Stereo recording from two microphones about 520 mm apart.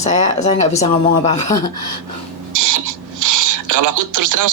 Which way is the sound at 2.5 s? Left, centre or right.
Right.